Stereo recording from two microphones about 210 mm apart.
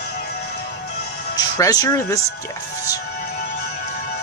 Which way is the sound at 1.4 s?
15° left (ahead or behind).